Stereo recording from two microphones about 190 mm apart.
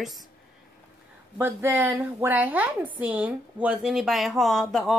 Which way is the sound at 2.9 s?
10° right (ahead or behind).